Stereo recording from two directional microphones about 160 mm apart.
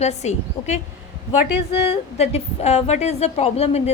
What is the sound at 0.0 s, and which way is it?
Speech, 45° left (ahead or behind).